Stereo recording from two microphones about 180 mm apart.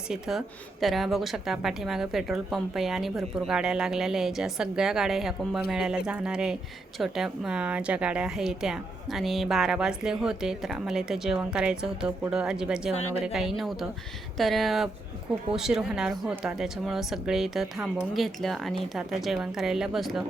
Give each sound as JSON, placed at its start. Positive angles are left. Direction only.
{"t": 0.1, "sound": "a woman's voice", "side_deg": 0}
{"t": 12.9, "sound": "a woman's voice", "side_deg": 35}
{"t": 13.2, "sound": "a woman's voice", "side_deg": 0}